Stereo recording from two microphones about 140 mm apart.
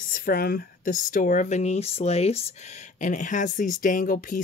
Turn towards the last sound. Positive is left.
turn(degrees=85)